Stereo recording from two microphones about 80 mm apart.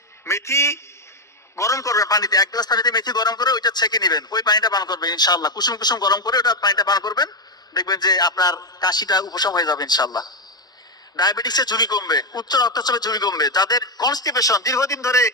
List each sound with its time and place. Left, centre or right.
0.3 s a man's voice: left